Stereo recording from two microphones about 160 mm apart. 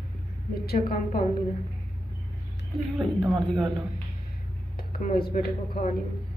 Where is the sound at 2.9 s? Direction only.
Centre (ahead or behind).